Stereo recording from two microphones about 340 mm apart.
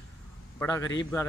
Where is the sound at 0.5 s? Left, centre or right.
Centre.